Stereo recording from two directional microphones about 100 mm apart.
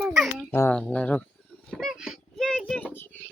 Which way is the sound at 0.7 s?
15° left (ahead or behind).